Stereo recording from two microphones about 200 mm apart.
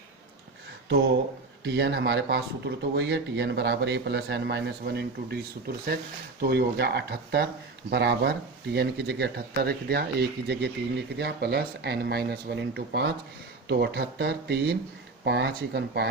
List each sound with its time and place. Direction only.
1.6 s speech: 60° right (ahead or behind)